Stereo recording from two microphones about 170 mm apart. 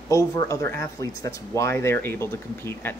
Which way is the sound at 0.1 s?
20° left (ahead or behind).